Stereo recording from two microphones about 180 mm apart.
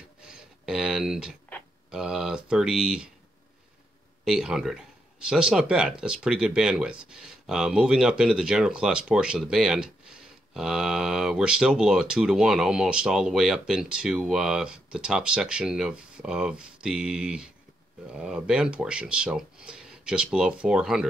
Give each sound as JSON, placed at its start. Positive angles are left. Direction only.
{"t": 0.7, "sound": "speech", "side_deg": -5}
{"t": 4.2, "sound": "speech", "side_deg": -5}